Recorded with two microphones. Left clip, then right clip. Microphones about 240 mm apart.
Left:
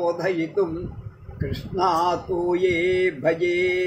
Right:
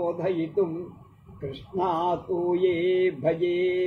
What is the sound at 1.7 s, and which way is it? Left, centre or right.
A man's voice, left.